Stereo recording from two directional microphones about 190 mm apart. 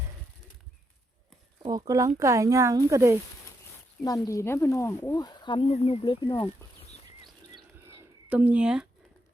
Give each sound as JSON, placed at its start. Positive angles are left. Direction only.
{"t": 1.6, "sound": "speech", "side_deg": -20}
{"t": 4.3, "sound": "speech", "side_deg": 15}
{"t": 8.3, "sound": "speech", "side_deg": -10}